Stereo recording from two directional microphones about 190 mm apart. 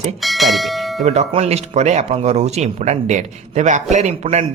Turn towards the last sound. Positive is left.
turn(degrees=-35)  # may be behind; listen again after turning